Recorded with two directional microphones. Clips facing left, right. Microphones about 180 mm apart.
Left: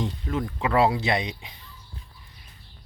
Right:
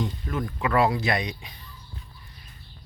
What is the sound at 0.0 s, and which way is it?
Speech, 25° left (ahead or behind).